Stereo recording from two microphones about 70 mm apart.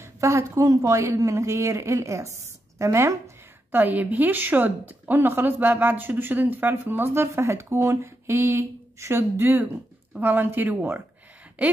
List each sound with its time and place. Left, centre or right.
0.0 s speech: right
3.7 s a woman's voice: right
7.2 s a woman's voice: right